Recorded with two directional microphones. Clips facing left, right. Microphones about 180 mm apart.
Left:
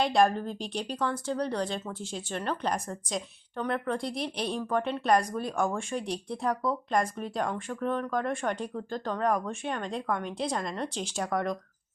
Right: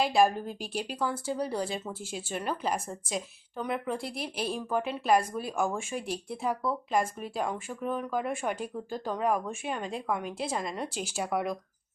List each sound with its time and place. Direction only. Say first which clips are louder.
0.0 s speech: even; 5° right (ahead or behind)